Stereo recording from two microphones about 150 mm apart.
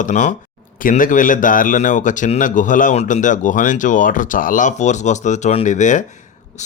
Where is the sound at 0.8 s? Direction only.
65° left (ahead or behind).